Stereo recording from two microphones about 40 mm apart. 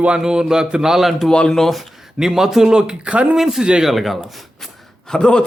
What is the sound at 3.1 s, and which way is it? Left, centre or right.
Speech, right.